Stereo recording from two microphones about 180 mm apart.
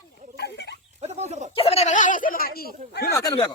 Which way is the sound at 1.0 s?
35° right (ahead or behind).